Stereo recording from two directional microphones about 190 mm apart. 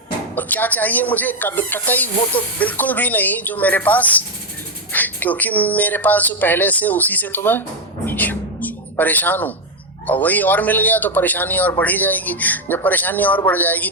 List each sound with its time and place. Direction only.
0.3 s speech: 10° left (ahead or behind)
8.0 s a sound: 10° left (ahead or behind)
10.1 s speech: 10° left (ahead or behind)